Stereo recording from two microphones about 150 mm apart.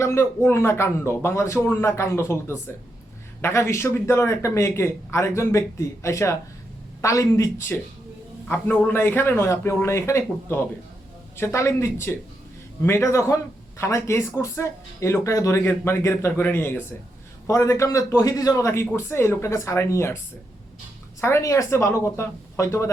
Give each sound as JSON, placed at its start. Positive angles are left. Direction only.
{"t": 0.0, "sound": "speech", "side_deg": 20}
{"t": 3.4, "sound": "speech", "side_deg": 20}